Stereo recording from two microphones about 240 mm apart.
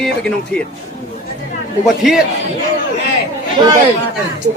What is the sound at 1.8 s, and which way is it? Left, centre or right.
Speech, centre.